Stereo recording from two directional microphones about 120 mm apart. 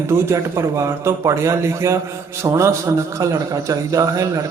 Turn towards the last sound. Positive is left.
turn(degrees=-30)  # may be behind; listen again after turning